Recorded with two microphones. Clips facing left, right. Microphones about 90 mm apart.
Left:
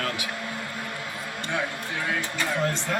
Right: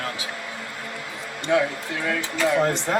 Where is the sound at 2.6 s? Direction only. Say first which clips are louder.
Right 5 dB; 25° right (ahead or behind).